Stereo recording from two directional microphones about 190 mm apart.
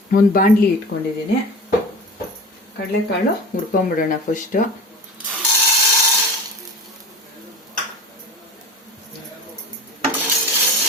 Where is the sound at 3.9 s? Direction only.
45° left (ahead or behind).